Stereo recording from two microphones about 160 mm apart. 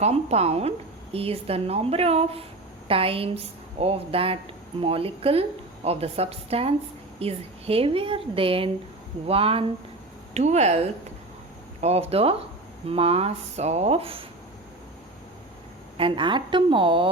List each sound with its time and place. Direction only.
0.0 s a woman's voice: 40° right (ahead or behind)
11.8 s a woman's voice: 40° right (ahead or behind)
16.0 s a woman's voice: 30° right (ahead or behind)